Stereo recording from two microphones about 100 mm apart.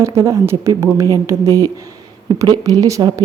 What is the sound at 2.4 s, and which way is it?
Speech, 35° right (ahead or behind).